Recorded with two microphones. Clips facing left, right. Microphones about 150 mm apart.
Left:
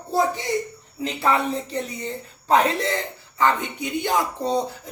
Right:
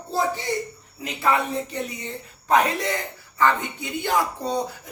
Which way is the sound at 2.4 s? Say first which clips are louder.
Left 1 dB; 30° left (ahead or behind).